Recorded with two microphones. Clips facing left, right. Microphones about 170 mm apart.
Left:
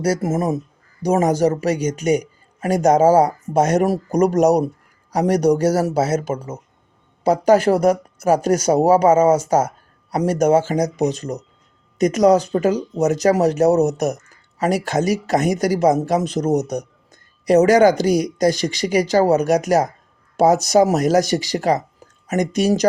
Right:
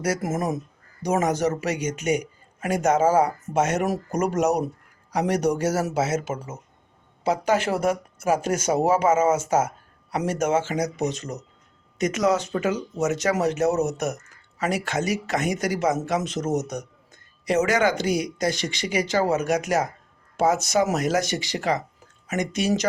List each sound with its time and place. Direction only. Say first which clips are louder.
0.0 s speech: left 6 dB; 30° left (ahead or behind)